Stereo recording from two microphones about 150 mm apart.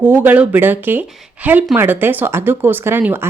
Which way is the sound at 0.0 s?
15° right (ahead or behind).